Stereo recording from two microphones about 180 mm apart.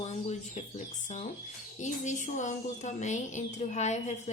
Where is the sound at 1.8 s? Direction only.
40° left (ahead or behind).